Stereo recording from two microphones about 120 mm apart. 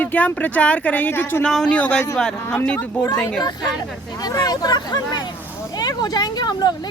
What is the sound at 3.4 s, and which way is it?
Speech, 35° left (ahead or behind).